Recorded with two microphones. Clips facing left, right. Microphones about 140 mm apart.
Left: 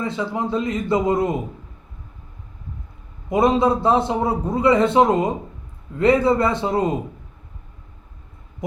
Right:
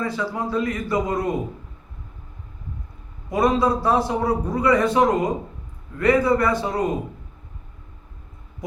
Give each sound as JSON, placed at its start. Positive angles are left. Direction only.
{"t": 0.0, "sound": "a man's voice", "side_deg": 20}
{"t": 3.2, "sound": "a man's voice", "side_deg": 20}